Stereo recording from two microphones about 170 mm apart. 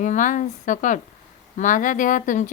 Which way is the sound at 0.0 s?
50° left (ahead or behind).